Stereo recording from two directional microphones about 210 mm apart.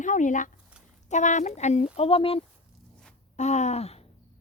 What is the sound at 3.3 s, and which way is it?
Gasp, 35° left (ahead or behind).